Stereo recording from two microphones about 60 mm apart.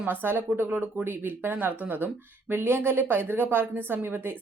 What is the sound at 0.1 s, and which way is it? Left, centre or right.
Speech, right.